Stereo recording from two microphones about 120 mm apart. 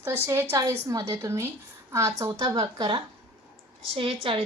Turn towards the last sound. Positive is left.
turn(degrees=-45)  # may be behind; listen again after turning